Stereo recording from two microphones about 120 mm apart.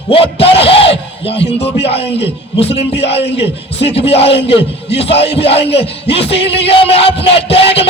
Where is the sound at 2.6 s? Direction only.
55° left (ahead or behind).